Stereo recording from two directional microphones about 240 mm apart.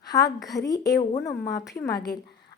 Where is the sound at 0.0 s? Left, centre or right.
Centre.